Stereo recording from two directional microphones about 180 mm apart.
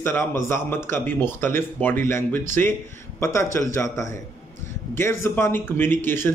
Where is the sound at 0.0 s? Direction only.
15° left (ahead or behind).